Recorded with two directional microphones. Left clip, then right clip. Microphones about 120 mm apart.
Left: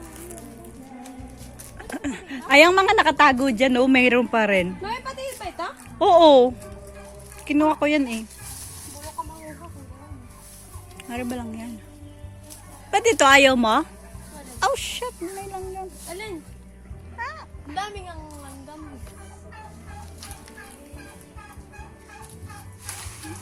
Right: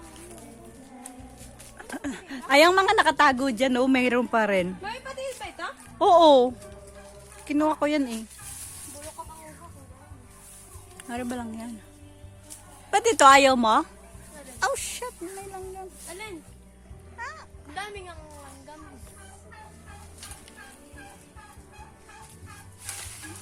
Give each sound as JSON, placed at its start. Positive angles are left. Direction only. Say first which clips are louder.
{"t": 1.8, "sound": "a sound", "louder": "left 4 dB", "side_deg": -20}
{"t": 2.5, "sound": "speech", "louder": "left 4 dB", "side_deg": -30}
{"t": 4.8, "sound": "a sound", "louder": "left 4 dB", "side_deg": 0}
{"t": 6.0, "sound": "speech", "louder": "left 3 dB", "side_deg": -35}
{"t": 10.9, "sound": "speech", "louder": "left 2 dB", "side_deg": -45}
{"t": 12.9, "sound": "speech", "louder": "left 1 dB", "side_deg": -45}
{"t": 13.4, "sound": "speech", "louder": "left 2 dB", "side_deg": -25}
{"t": 14.6, "sound": "a sound", "louder": "left 4 dB", "side_deg": -15}
{"t": 17.2, "sound": "music", "louder": "left 5 dB", "side_deg": 5}